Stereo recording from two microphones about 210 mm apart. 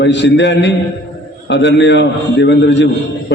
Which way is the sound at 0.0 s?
55° left (ahead or behind).